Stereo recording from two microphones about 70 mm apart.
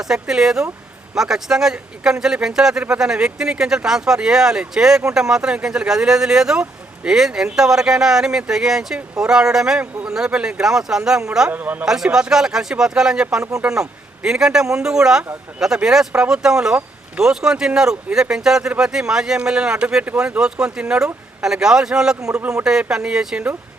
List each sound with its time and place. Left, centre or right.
0.0 s speech: centre
11.5 s speech: right
11.9 s speech: centre
15.2 s speech: right
15.6 s speech: centre